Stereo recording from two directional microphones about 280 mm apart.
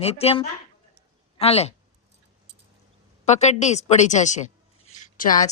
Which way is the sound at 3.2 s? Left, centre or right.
Left.